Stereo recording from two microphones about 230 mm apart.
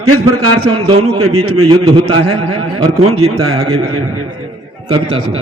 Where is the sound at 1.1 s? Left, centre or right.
Right.